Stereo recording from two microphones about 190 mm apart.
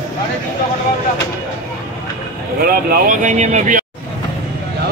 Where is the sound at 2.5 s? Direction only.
50° right (ahead or behind).